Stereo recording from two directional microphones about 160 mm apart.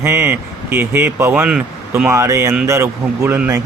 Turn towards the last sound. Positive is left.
turn(degrees=-10)  # may be behind; listen again after turning